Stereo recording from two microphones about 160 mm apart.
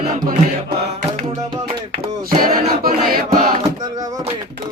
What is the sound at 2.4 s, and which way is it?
Choir, 60° right (ahead or behind).